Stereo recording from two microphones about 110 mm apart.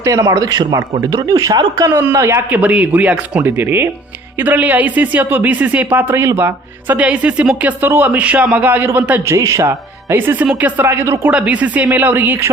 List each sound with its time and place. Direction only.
0.0 s speech: 30° right (ahead or behind)
9.3 s speech: 30° right (ahead or behind)
11.3 s speech: 10° right (ahead or behind)